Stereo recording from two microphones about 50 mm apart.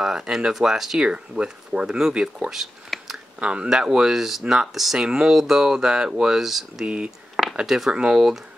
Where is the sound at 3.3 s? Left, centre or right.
Right.